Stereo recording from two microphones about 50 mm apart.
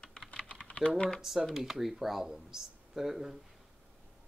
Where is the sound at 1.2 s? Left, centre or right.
Centre.